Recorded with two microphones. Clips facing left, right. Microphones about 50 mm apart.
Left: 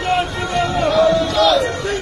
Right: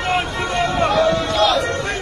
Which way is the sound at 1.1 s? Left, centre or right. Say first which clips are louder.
Left 3 dB; right.